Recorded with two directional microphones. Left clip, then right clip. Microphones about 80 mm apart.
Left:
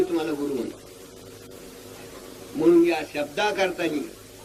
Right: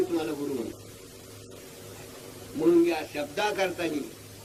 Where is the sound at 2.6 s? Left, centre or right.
Centre.